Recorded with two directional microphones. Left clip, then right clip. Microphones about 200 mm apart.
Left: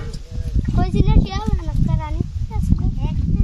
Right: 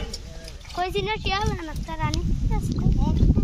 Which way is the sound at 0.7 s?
5° left (ahead or behind).